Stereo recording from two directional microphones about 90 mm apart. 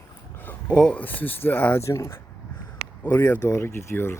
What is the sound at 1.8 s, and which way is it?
Speech, 35° left (ahead or behind).